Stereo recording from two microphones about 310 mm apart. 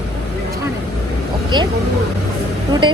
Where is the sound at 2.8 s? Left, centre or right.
Centre.